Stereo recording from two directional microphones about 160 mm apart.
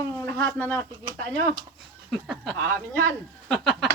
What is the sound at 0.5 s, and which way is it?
Speech, 10° left (ahead or behind).